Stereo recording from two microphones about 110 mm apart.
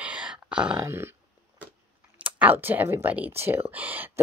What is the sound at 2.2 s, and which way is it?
Speech, 15° right (ahead or behind).